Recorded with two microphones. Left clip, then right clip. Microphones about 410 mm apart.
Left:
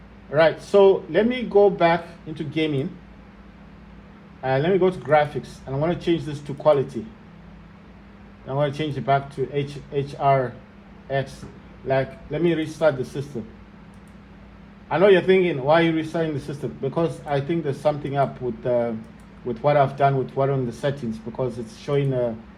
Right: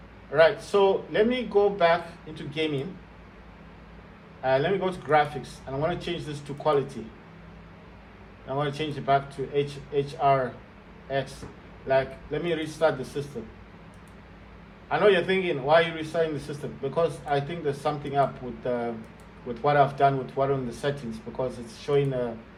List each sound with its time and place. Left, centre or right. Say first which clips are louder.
0.3 s a man's voice: left 4 dB; centre
4.4 s a man's voice: left 4 dB; centre
8.4 s a man's voice: left 5 dB; centre
11.9 s a man's voice: left 1 dB; centre
14.8 s a man's voice: left 5 dB; centre